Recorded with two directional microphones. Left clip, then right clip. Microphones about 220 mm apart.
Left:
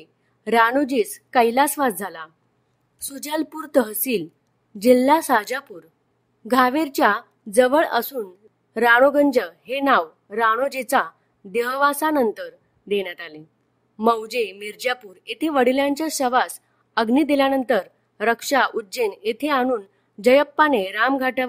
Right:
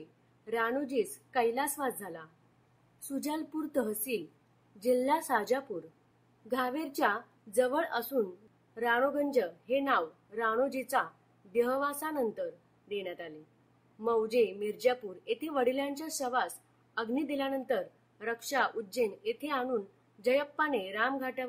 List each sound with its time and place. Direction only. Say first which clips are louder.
0.5 s a woman's voice: left 15 dB; 55° left (ahead or behind)